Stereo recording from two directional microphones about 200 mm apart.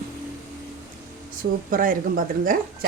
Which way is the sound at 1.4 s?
45° right (ahead or behind).